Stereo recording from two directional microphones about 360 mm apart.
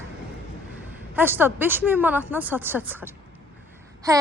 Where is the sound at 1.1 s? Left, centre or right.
Centre.